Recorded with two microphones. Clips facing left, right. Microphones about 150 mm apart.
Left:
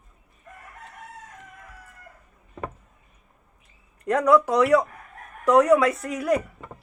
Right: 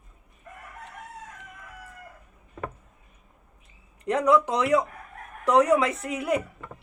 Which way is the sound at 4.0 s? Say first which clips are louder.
Left 2 dB; 20° right (ahead or behind).